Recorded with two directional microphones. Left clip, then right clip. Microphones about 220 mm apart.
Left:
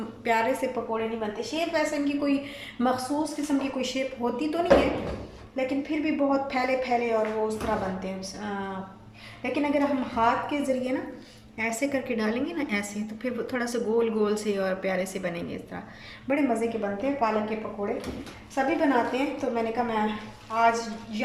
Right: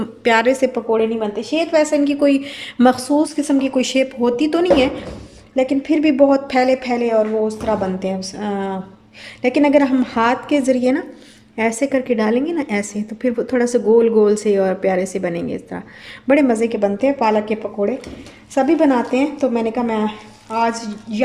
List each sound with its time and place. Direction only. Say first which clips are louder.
0.3 s a woman's voice: right 11 dB; 45° right (ahead or behind)
16.2 s a woman's voice: right 11 dB; 45° right (ahead or behind)
18.5 s a woman's voice: right 9 dB; 50° right (ahead or behind)